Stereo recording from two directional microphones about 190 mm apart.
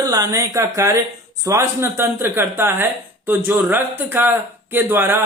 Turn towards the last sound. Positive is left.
turn(degrees=-10)  # may be behind; listen again after turning